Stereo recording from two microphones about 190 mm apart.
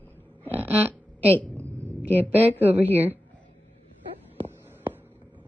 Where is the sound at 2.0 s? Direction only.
10° left (ahead or behind).